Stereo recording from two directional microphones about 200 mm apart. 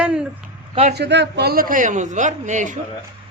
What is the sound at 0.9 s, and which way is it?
A man's voice, 60° right (ahead or behind).